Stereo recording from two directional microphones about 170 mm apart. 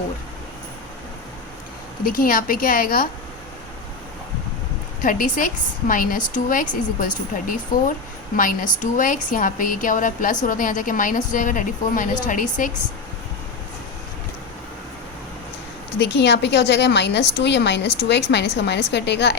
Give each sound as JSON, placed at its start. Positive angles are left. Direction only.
{"t": 2.0, "sound": "a woman's voice", "side_deg": 55}
{"t": 5.0, "sound": "a woman's voice", "side_deg": 55}
{"t": 16.0, "sound": "a woman's voice", "side_deg": 85}